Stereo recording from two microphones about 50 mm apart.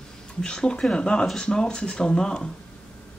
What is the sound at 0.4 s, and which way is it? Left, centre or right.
Speech, centre.